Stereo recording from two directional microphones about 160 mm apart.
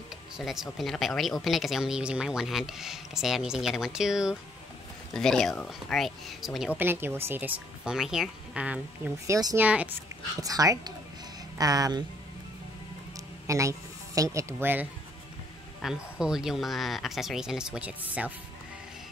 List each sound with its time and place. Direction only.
0.4 s speech: centre (ahead or behind)
9.3 s speech: 25° right (ahead or behind)
9.6 s speech: 10° right (ahead or behind)
10.4 s speech: 20° right (ahead or behind)
13.5 s speech: 20° right (ahead or behind)